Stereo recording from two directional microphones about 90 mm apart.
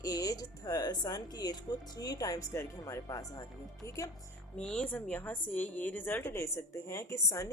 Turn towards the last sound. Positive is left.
turn(degrees=35)  # may be behind; listen again after turning